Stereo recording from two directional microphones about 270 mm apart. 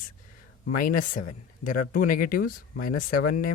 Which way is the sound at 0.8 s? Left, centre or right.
Left.